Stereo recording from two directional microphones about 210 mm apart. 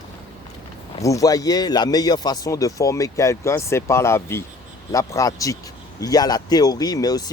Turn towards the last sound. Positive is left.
turn(degrees=20)  # may be behind; listen again after turning